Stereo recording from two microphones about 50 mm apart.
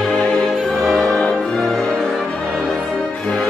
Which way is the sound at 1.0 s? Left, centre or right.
Left.